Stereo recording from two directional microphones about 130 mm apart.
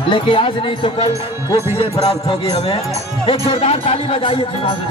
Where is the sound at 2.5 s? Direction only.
50° left (ahead or behind).